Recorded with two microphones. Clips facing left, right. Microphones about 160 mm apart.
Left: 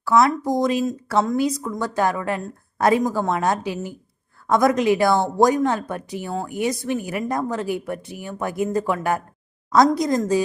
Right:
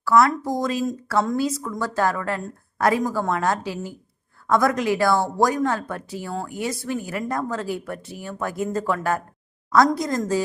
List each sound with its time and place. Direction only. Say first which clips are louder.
0.0 s a woman's voice: even; 20° left (ahead or behind)